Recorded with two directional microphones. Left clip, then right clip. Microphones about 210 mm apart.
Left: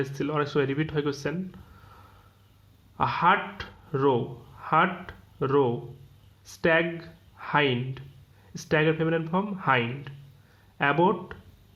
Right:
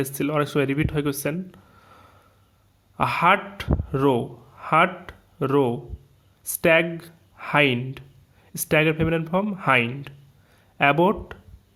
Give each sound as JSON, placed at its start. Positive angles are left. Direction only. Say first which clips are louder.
{"t": 0.0, "sound": "speech", "louder": "right 4 dB", "side_deg": -35}
{"t": 1.8, "sound": "sniff", "louder": "right 2 dB", "side_deg": -35}
{"t": 3.0, "sound": "speech", "louder": "right 3 dB", "side_deg": -35}